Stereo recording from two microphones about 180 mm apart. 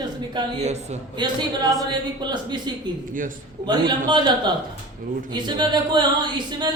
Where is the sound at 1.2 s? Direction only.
25° right (ahead or behind).